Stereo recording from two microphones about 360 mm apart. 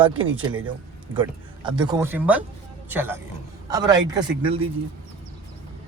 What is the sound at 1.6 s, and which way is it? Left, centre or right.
A man's voice, centre.